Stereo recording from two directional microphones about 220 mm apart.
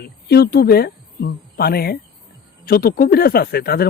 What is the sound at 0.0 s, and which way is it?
Speech, 45° left (ahead or behind).